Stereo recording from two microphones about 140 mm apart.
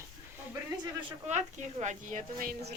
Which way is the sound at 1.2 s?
55° right (ahead or behind).